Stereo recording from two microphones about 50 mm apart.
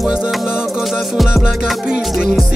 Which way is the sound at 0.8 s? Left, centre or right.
Centre.